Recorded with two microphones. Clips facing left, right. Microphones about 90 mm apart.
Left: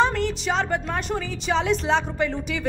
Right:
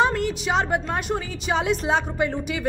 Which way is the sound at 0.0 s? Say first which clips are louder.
Even; 5° right (ahead or behind).